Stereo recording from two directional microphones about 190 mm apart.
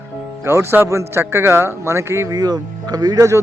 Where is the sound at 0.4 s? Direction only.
15° right (ahead or behind).